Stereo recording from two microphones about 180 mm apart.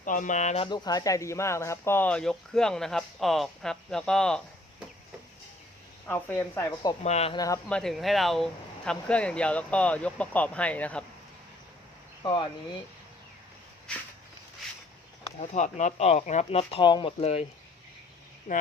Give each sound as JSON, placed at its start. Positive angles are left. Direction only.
{"t": 0.0, "sound": "speech", "side_deg": 45}
{"t": 6.1, "sound": "speech", "side_deg": 10}
{"t": 7.0, "sound": "speech", "side_deg": 35}
{"t": 7.3, "sound": "speech", "side_deg": 20}
{"t": 7.7, "sound": "speech", "side_deg": 0}
{"t": 12.2, "sound": "speech", "side_deg": 25}
{"t": 15.5, "sound": "speech", "side_deg": 40}
{"t": 18.5, "sound": "speech", "side_deg": 45}